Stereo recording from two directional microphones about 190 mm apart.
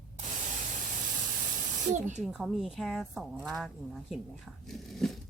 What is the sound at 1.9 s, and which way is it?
Speech, 40° right (ahead or behind).